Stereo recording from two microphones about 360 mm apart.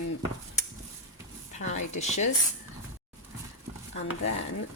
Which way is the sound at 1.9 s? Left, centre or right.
Centre.